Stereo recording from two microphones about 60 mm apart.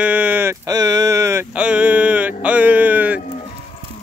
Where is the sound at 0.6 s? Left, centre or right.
Right.